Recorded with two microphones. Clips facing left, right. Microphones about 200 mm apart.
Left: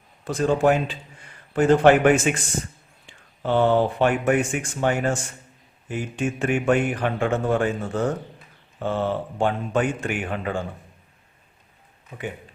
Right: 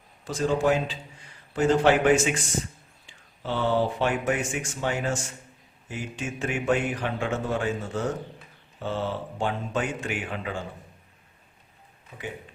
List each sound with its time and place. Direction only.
0.3 s a man's voice: 55° left (ahead or behind)
12.1 s a man's voice: 50° left (ahead or behind)